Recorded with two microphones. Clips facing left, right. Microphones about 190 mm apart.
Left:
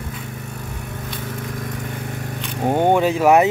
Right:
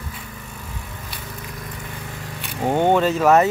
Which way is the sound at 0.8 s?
55° left (ahead or behind).